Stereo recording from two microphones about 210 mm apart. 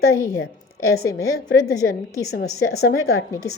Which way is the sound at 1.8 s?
55° left (ahead or behind).